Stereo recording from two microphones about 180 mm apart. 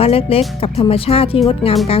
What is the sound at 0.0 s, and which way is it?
Speech, 30° left (ahead or behind).